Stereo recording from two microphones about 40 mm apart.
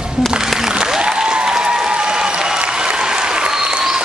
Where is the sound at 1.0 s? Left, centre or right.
Centre.